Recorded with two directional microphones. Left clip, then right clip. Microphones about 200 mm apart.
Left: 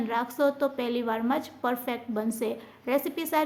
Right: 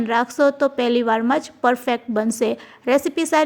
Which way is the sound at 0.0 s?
35° right (ahead or behind).